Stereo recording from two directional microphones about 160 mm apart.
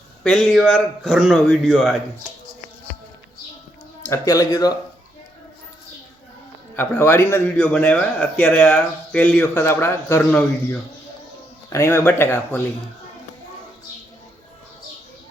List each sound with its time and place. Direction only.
0.2 s a man's voice: centre (ahead or behind)
4.0 s speech: 20° left (ahead or behind)
6.7 s speech: 15° left (ahead or behind)